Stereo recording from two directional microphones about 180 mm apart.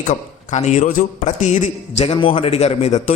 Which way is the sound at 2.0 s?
30° left (ahead or behind).